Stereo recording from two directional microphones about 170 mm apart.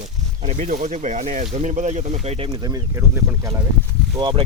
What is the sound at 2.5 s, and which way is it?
Speech, 20° right (ahead or behind).